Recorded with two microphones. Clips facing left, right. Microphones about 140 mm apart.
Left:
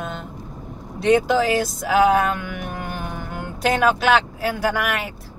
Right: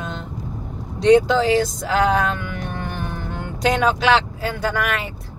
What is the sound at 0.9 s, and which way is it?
Speech, 5° left (ahead or behind).